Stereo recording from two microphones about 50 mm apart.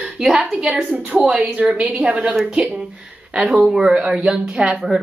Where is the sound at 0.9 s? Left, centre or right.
Right.